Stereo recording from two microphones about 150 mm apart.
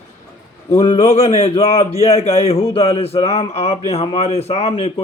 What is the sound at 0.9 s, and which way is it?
A man's voice, 40° left (ahead or behind).